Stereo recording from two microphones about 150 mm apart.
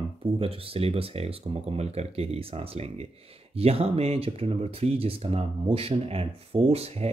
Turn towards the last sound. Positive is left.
turn(degrees=-40)  # may be behind; listen again after turning